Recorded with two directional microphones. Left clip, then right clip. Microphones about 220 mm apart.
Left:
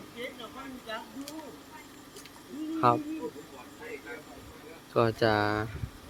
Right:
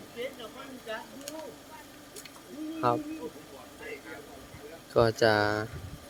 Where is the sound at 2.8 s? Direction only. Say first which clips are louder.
Left 3 dB; 10° left (ahead or behind).